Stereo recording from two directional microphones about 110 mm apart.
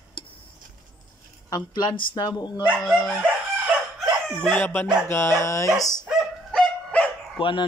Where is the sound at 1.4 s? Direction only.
35° left (ahead or behind).